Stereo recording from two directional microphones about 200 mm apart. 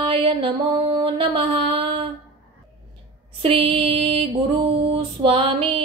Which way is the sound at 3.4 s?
30° right (ahead or behind).